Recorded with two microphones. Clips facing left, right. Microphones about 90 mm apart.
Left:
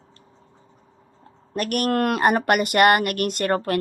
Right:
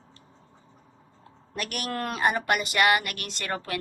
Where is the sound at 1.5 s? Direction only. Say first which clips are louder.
Left 10 dB; 50° left (ahead or behind).